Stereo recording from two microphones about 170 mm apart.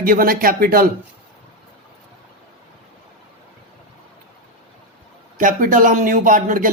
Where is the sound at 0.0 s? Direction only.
55° right (ahead or behind).